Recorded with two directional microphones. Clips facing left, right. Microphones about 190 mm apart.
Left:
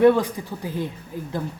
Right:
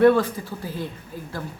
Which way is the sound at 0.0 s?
15° left (ahead or behind).